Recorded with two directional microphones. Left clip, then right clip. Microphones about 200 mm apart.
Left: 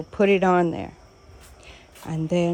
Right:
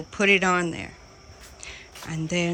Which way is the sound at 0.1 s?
15° left (ahead or behind).